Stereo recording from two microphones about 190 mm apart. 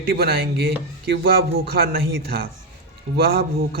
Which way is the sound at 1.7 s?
50° right (ahead or behind).